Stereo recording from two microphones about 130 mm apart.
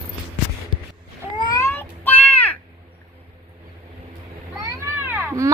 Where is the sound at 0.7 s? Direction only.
40° right (ahead or behind).